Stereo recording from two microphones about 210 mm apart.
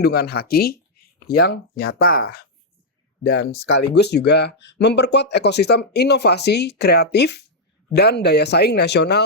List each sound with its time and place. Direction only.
0.0 s speech: 50° left (ahead or behind)